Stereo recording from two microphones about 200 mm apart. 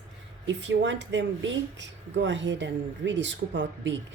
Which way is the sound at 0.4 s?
65° right (ahead or behind).